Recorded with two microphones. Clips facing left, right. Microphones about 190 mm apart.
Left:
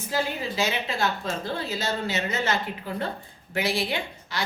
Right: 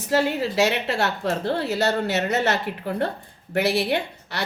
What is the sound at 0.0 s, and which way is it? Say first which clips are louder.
A woman's voice: right 6 dB; 75° right (ahead or behind).